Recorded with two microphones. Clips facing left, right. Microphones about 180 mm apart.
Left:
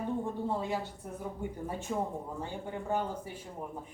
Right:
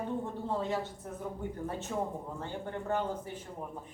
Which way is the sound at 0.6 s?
10° left (ahead or behind).